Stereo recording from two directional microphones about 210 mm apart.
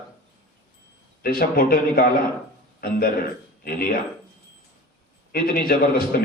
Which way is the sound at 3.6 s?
45° left (ahead or behind).